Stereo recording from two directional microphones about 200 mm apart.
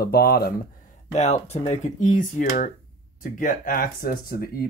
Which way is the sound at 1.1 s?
35° left (ahead or behind).